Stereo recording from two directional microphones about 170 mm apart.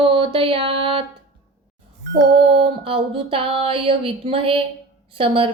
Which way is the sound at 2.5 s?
35° right (ahead or behind).